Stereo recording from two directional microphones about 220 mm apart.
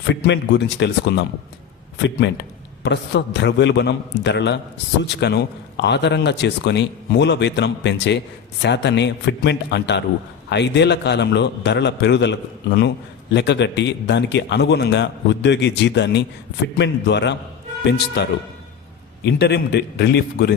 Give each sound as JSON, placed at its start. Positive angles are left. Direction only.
{"t": 0.1, "sound": "a man's voice", "side_deg": 50}